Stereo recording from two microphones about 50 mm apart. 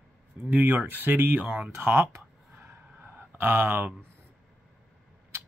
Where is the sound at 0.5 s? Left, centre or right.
Right.